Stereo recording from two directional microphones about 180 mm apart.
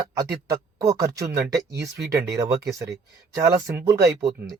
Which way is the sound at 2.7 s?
15° right (ahead or behind).